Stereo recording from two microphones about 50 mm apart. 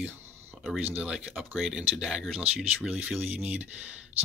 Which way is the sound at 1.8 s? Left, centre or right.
Centre.